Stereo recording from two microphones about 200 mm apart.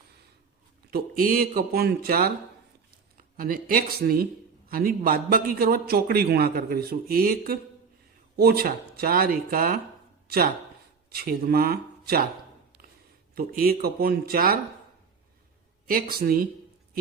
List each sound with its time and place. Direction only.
0.9 s a man's voice: 45° right (ahead or behind)
13.3 s a man's voice: 45° right (ahead or behind)
15.9 s a man's voice: 45° right (ahead or behind)